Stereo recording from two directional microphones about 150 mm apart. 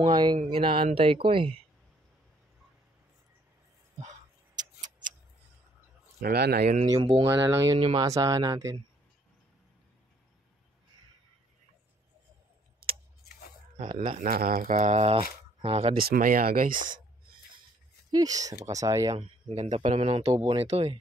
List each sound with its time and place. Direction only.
0.0 s speech: 30° right (ahead or behind)
4.6 s tick-tock: 55° right (ahead or behind)
6.2 s speech: 90° right
6.6 s speech: 50° right (ahead or behind)
6.9 s speech: 25° right (ahead or behind)
7.8 s speech: 35° right (ahead or behind)
8.1 s speech: 25° right (ahead or behind)
14.1 s speech: 70° right (ahead or behind); by 16.1 s 40° right (ahead or behind)
16.1 s speech: 75° right (ahead or behind)
18.1 s speech: 25° right (ahead or behind)
19.5 s speech: 50° right (ahead or behind)